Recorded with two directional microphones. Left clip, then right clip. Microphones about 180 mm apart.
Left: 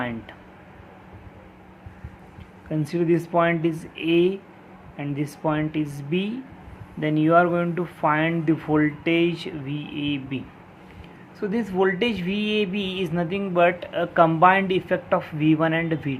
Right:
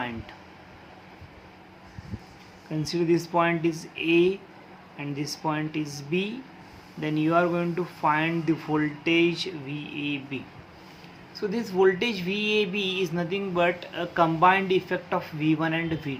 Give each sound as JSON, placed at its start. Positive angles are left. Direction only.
{"t": 2.8, "sound": "speech", "side_deg": 20}